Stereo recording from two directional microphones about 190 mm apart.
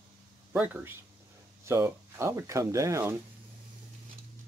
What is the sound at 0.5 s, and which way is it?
Speech, 10° right (ahead or behind).